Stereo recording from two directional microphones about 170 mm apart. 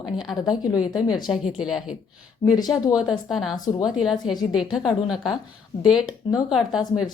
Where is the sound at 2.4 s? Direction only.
25° left (ahead or behind).